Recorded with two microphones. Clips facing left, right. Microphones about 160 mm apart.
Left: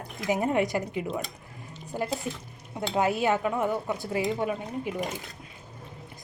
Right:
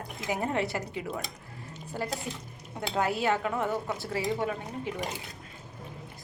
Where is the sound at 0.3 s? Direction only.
20° left (ahead or behind).